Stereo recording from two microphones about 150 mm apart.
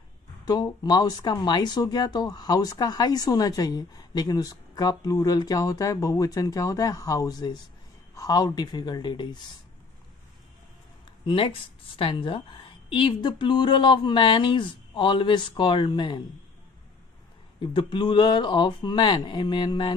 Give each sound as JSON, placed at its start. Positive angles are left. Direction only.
{"t": 0.5, "sound": "speech", "side_deg": 25}
{"t": 11.2, "sound": "speech", "side_deg": 35}
{"t": 17.6, "sound": "speech", "side_deg": 35}